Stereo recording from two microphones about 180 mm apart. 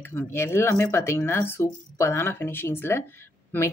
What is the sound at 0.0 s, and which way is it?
Speech, 10° left (ahead or behind).